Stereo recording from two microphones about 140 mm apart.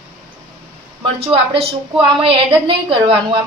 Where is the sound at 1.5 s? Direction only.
40° right (ahead or behind).